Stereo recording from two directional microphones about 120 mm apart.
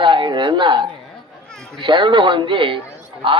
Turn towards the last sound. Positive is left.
turn(degrees=-45)  # may be behind; listen again after turning